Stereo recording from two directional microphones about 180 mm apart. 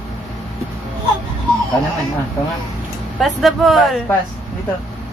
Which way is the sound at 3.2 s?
Centre (ahead or behind).